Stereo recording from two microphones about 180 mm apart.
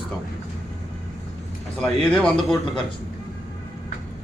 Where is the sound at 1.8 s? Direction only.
5° left (ahead or behind).